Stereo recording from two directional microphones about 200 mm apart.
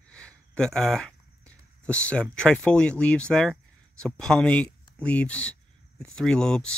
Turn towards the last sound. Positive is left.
turn(degrees=5)  # may be behind; listen again after turning